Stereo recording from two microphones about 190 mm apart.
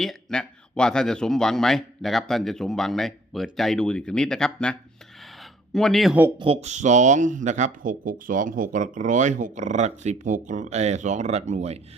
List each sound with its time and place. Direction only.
0.0 s speech: centre (ahead or behind)
6.4 s speech: 30° right (ahead or behind)